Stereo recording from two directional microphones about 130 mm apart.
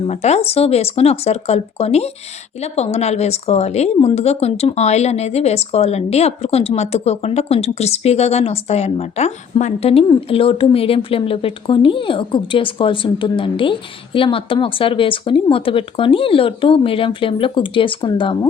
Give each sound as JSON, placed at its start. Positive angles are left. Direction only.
{"t": 0.1, "sound": "speech", "side_deg": 60}
{"t": 10.2, "sound": "speech", "side_deg": 45}